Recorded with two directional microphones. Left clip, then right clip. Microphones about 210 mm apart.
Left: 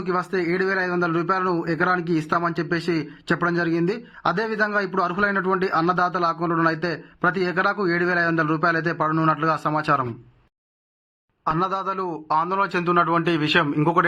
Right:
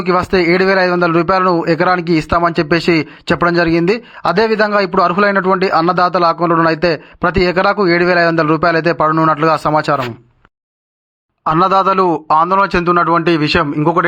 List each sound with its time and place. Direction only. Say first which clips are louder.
0.0 s speech: right 11 dB; 40° right (ahead or behind)
11.4 s speech: right 12 dB; 40° right (ahead or behind); by 14.0 s 25° right (ahead or behind)